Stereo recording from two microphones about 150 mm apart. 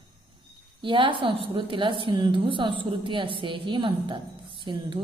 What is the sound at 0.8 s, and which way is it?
A woman's voice, 35° right (ahead or behind).